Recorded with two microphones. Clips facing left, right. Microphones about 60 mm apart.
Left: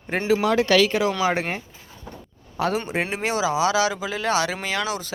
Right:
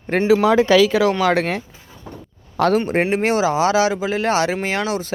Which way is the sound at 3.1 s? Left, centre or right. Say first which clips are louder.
Right 4 dB; right.